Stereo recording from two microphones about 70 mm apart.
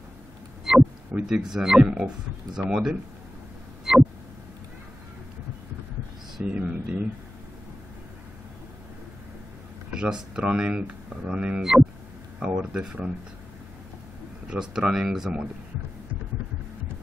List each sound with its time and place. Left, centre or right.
0.7 s a sound: centre
1.1 s speech: centre
3.9 s a sound: centre
6.4 s speech: centre
9.8 s speech: centre
14.5 s speech: centre